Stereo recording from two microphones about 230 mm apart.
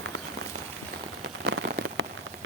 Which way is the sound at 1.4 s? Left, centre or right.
Right.